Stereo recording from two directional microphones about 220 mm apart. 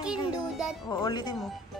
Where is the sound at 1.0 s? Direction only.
20° left (ahead or behind).